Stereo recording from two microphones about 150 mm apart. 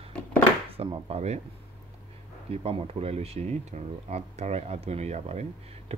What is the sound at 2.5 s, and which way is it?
Speech, 45° right (ahead or behind).